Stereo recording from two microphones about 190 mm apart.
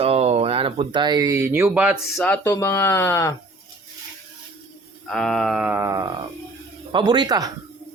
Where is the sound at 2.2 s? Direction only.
10° left (ahead or behind).